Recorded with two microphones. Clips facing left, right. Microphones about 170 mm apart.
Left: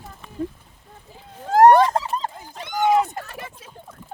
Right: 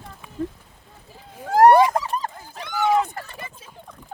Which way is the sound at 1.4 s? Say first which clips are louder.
Left 1 dB; 20° left (ahead or behind).